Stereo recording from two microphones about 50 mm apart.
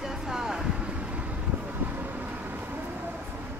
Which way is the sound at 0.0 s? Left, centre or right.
Centre.